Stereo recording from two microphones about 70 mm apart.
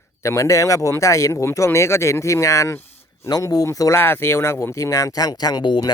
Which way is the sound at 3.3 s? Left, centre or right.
Left.